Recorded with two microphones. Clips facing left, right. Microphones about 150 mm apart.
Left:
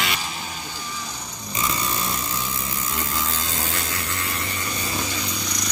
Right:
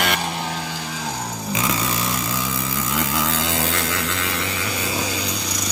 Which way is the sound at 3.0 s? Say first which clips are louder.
Right 6 dB; 85° right.